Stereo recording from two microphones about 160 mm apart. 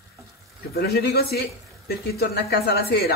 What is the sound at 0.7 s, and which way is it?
Speech, 80° left.